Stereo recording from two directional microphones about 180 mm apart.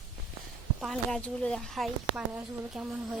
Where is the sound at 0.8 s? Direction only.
Centre (ahead or behind).